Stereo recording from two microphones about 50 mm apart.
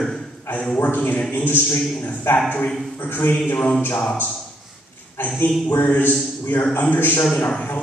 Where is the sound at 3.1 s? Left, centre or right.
Left.